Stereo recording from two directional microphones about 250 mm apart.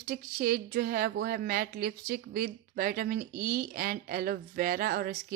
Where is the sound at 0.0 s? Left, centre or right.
Right.